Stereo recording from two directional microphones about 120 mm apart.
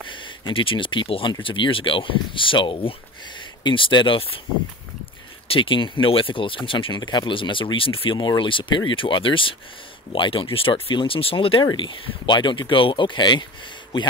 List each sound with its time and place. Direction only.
0.1 s speech: 45° left (ahead or behind)
5.5 s speech: 45° left (ahead or behind)